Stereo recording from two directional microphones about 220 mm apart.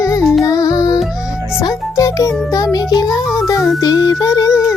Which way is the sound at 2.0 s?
15° left (ahead or behind).